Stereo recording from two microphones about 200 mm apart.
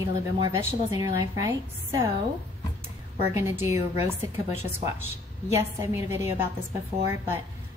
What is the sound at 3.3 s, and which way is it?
Speech, 10° right (ahead or behind).